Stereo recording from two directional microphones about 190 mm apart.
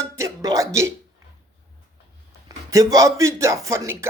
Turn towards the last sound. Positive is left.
turn(degrees=-15)  # may be behind; listen again after turning